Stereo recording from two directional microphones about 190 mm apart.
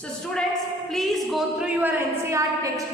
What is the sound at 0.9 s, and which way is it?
A woman's voice, centre (ahead or behind).